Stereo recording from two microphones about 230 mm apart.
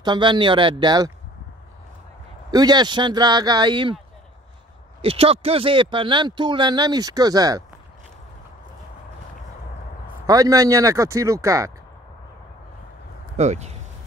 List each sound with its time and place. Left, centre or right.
0.0 s speech: centre
2.5 s speech: centre
5.0 s speech: right
10.2 s speech: centre
13.4 s speech: right